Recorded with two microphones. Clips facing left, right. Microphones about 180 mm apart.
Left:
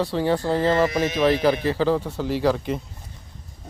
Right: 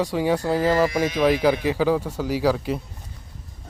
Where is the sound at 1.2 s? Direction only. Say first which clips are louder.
Even; 10° right (ahead or behind).